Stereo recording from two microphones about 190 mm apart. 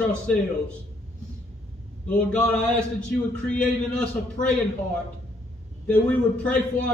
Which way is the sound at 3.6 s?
5° left (ahead or behind).